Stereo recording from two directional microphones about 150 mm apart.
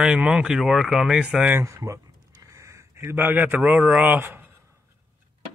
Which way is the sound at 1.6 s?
20° right (ahead or behind).